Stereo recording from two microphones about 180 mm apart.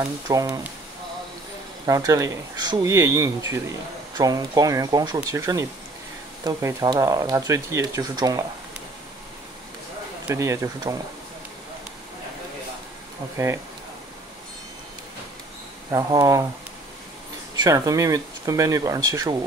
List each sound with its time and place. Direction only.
0.3 s speech: 20° right (ahead or behind)
1.9 s speech: 20° right (ahead or behind)
10.2 s speech: 15° right (ahead or behind)
15.9 s speech: 20° right (ahead or behind)
17.6 s speech: 20° right (ahead or behind)